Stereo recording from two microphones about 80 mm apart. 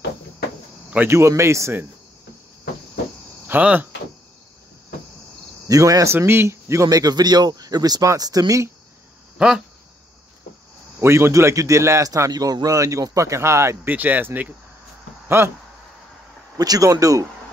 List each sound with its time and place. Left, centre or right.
1.0 s a man's voice: right
3.4 s speech: right
5.7 s speech: right
6.1 s speech: right
11.0 s a man's voice: right
13.8 s speech: right
15.2 s speech: right
16.5 s speech: right